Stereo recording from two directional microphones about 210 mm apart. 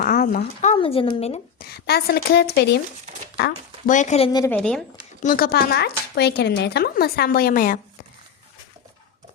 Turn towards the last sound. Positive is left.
turn(degrees=40)  # may be behind; listen again after turning